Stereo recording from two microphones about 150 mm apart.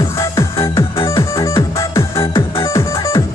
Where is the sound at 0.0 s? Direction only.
20° left (ahead or behind).